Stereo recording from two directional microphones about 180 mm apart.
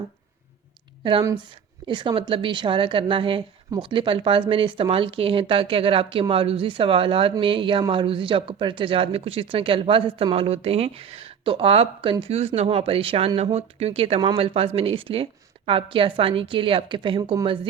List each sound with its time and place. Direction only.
1.9 s a woman's voice: 25° right (ahead or behind)